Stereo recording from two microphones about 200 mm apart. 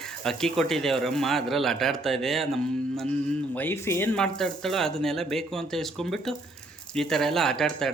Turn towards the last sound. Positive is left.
turn(degrees=5)  # may be behind; listen again after turning